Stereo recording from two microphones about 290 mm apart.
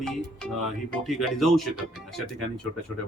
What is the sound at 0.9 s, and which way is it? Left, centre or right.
Speech, centre.